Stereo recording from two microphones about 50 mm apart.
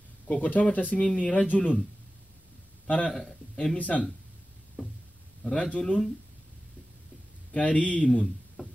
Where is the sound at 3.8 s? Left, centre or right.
Left.